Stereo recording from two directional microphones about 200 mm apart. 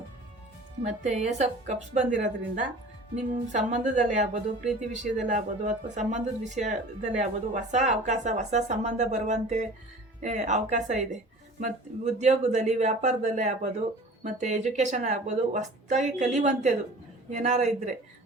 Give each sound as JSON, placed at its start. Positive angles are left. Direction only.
{"t": 0.8, "sound": "speech", "side_deg": -35}